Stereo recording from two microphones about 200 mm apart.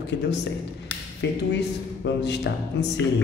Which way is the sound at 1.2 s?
55° left (ahead or behind).